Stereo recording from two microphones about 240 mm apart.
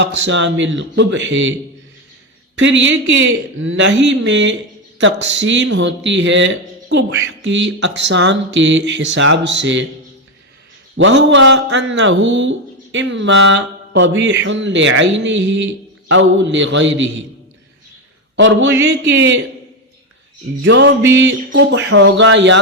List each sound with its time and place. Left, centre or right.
0.0 s speech: right
2.6 s speech: right
10.9 s speech: right
18.3 s speech: right
20.7 s speech: right